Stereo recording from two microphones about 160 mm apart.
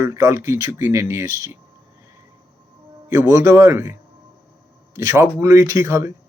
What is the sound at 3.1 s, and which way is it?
Speech, 20° right (ahead or behind).